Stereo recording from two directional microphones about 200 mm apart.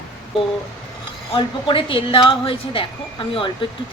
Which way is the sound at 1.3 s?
25° left (ahead or behind).